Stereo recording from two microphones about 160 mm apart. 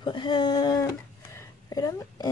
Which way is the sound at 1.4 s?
20° left (ahead or behind).